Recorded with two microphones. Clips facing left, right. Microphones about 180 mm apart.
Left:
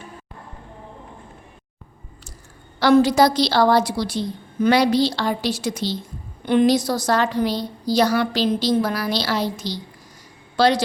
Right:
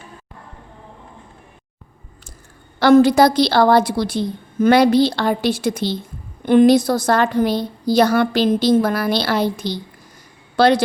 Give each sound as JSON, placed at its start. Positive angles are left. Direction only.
{"t": 2.7, "sound": "a woman's voice", "side_deg": -55}